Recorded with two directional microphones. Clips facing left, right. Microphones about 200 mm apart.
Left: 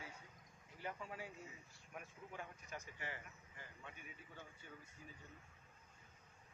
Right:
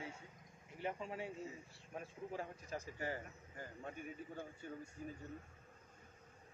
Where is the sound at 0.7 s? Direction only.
20° right (ahead or behind); by 5.1 s 45° right (ahead or behind).